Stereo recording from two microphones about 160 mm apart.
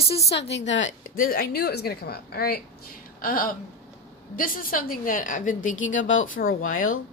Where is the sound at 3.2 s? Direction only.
60° left (ahead or behind).